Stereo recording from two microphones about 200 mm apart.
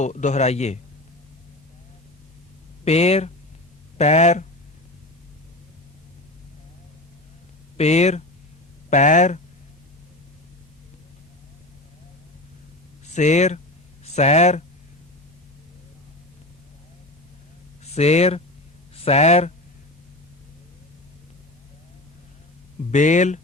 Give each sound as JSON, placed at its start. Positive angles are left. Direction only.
{"t": 0.0, "sound": "a man's voice", "side_deg": 35}
{"t": 2.8, "sound": "a man's voice", "side_deg": 30}
{"t": 7.8, "sound": "a man's voice", "side_deg": 35}
{"t": 13.1, "sound": "a man's voice", "side_deg": 35}
{"t": 17.9, "sound": "a man's voice", "side_deg": 35}
{"t": 22.9, "sound": "a man's voice", "side_deg": 35}